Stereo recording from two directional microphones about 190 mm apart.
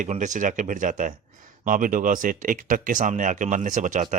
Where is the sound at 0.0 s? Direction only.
40° right (ahead or behind).